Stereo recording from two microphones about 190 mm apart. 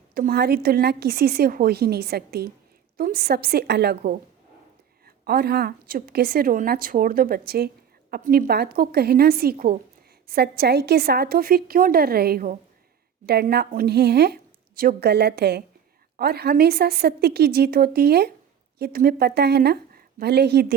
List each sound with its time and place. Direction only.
0.1 s a woman's voice: 50° right (ahead or behind)